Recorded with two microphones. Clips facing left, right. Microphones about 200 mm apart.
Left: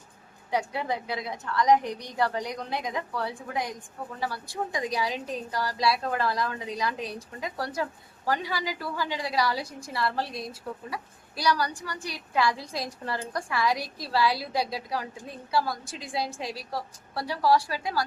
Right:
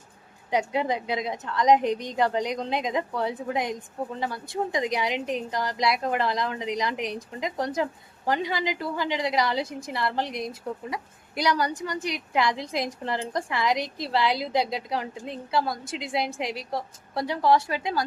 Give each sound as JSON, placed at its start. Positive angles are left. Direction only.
{"t": 0.5, "sound": "a woman's voice", "side_deg": -20}